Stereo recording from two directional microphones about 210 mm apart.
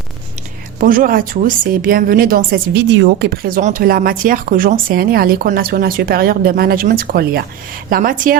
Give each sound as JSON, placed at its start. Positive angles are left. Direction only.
{"t": 0.8, "sound": "a woman's voice", "side_deg": -40}